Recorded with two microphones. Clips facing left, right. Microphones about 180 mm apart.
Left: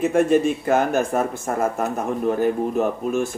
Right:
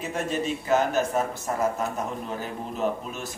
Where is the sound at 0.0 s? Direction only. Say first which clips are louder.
Left 11 dB; 50° left (ahead or behind).